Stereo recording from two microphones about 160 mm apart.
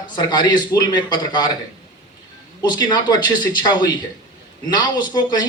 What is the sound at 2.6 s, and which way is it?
Speech, 25° left (ahead or behind).